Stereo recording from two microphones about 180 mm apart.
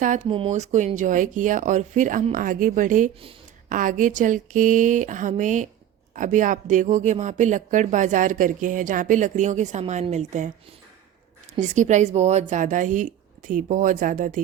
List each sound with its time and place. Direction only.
0.0 s speech: 45° right (ahead or behind)
0.3 s speech: 35° right (ahead or behind)
11.6 s speech: 40° right (ahead or behind)